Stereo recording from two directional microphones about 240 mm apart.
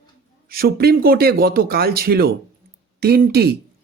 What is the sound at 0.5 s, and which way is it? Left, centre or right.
Speech, right.